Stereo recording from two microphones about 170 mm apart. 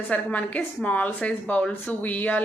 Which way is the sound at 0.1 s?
10° left (ahead or behind).